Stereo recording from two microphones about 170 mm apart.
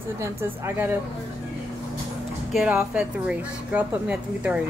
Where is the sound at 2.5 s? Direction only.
10° right (ahead or behind).